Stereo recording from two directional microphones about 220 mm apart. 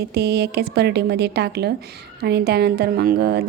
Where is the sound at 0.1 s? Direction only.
45° right (ahead or behind).